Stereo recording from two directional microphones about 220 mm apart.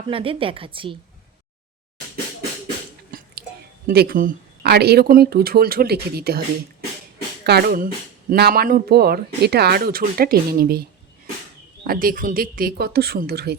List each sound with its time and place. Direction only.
0.1 s speech: 25° right (ahead or behind)
3.8 s speech: 40° right (ahead or behind)
7.4 s speech: 45° right (ahead or behind)